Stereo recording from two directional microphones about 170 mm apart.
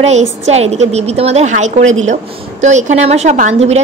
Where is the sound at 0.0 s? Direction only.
40° right (ahead or behind).